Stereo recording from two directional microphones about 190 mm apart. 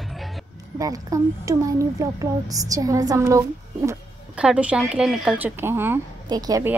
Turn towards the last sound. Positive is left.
turn(degrees=-20)  # may be behind; listen again after turning